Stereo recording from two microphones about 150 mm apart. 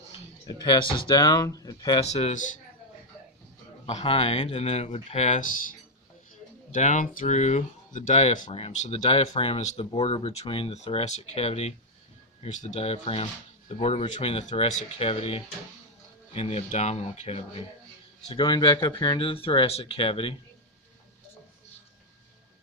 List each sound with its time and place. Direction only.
0.4 s speech: 30° left (ahead or behind)
2.0 s speech: 45° left (ahead or behind)
3.8 s speech: 40° left (ahead or behind); by 5.7 s 60° left (ahead or behind)
6.7 s speech: 60° left (ahead or behind); by 17.7 s 40° left (ahead or behind)
18.3 s speech: 30° left (ahead or behind)